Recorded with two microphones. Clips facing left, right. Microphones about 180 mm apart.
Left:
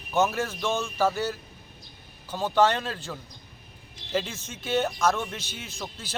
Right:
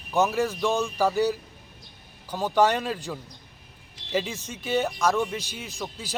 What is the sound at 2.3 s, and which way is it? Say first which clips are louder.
Speech: right 1 dB; 15° right (ahead or behind).